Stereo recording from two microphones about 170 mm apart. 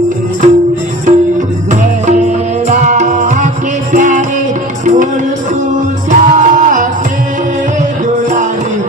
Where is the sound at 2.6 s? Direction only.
45° right (ahead or behind).